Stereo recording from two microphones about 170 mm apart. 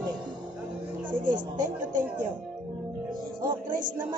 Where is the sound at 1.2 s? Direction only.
50° right (ahead or behind).